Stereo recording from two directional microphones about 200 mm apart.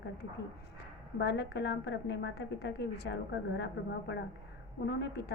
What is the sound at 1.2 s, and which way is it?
A woman's voice, 55° left (ahead or behind).